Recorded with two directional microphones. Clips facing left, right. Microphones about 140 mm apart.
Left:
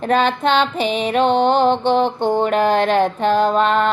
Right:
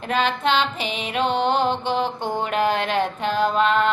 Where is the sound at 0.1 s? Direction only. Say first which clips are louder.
Left 5 dB; 35° left (ahead or behind).